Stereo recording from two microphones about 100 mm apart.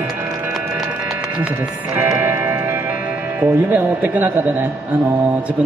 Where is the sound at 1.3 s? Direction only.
15° right (ahead or behind).